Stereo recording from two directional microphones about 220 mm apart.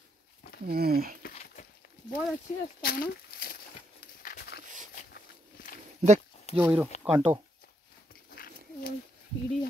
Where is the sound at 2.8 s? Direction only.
45° left (ahead or behind).